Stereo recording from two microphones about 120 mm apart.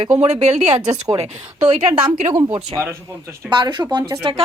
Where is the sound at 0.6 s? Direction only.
35° right (ahead or behind).